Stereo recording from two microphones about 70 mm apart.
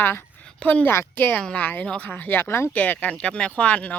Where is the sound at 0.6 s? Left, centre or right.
Centre.